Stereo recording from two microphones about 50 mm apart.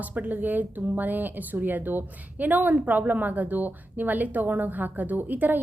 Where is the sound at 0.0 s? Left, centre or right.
Right.